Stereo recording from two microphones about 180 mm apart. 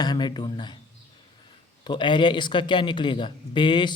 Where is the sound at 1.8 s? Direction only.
25° left (ahead or behind).